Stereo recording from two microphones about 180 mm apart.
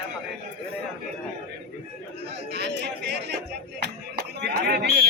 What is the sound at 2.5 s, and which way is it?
Chatter, 65° right (ahead or behind).